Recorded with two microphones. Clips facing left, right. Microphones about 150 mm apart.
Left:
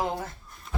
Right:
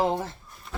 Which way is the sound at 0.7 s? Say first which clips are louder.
Left 1 dB; centre (ahead or behind).